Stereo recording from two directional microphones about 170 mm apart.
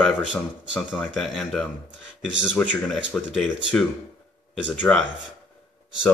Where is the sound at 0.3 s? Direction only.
5° left (ahead or behind).